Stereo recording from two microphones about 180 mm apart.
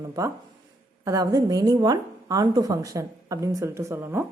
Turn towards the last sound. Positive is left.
turn(degrees=-15)  # may be behind; listen again after turning